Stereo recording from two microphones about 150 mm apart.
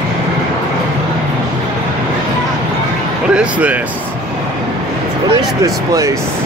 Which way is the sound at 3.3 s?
10° right (ahead or behind).